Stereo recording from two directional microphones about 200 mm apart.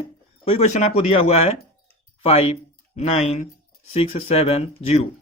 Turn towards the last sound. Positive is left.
turn(degrees=30)  # may be behind; listen again after turning